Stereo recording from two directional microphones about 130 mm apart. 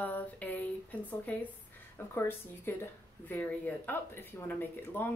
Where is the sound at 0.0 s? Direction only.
15° left (ahead or behind).